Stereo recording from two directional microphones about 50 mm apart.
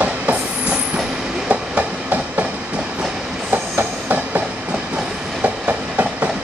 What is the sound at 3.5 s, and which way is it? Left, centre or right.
Train, right.